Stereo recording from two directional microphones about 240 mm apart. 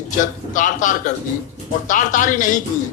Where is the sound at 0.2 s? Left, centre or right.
Left.